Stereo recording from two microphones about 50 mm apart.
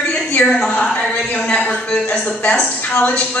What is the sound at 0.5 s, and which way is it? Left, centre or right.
A woman's voice, centre.